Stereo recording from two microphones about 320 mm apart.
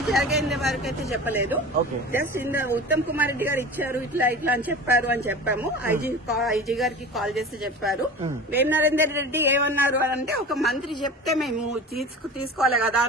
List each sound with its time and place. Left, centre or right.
0.1 s a man's voice: centre
12.5 s speech: centre